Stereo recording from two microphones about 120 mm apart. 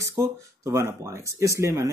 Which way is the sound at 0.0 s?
25° right (ahead or behind).